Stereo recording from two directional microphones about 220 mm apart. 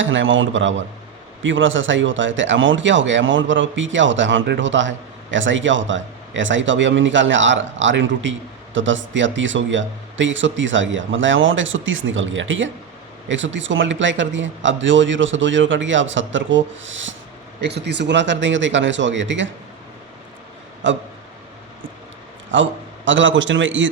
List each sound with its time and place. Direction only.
0.0 s speech: 60° right (ahead or behind)
20.8 s speech: 55° right (ahead or behind)
22.5 s speech: 60° right (ahead or behind)